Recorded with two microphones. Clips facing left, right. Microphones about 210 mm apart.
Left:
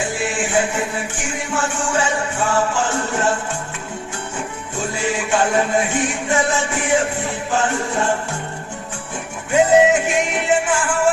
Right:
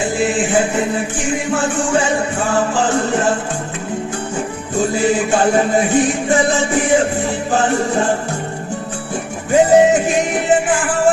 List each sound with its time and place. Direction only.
0.3 s music: 35° right (ahead or behind)
4.8 s music: 35° right (ahead or behind)
9.5 s music: 35° right (ahead or behind)